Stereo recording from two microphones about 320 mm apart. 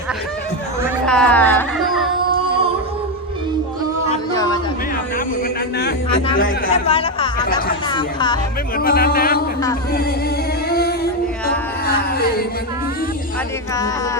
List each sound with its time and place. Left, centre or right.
1.0 s music: centre
4.4 s a sound: centre
6.4 s speech: centre
8.8 s speech: left
10.7 s singing: left
11.9 s music: left